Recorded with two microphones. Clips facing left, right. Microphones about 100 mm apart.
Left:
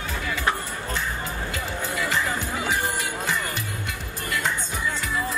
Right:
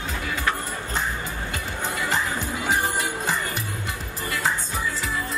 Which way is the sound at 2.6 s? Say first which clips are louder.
Right 4 dB; 40° right (ahead or behind).